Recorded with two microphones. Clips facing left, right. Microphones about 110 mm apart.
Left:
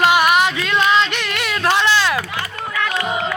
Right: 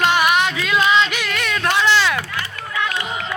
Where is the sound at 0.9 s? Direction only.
Centre (ahead or behind).